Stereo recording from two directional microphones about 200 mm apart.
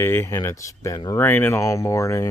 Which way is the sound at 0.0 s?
10° left (ahead or behind).